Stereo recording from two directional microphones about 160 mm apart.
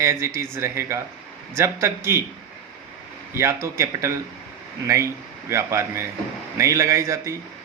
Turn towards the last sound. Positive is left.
turn(degrees=-20)  # may be behind; listen again after turning